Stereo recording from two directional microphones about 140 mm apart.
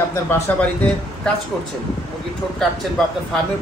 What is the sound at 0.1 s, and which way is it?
Speech, 15° left (ahead or behind).